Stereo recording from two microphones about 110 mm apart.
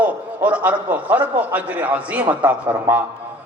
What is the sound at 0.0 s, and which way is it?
A man's voice, 15° right (ahead or behind).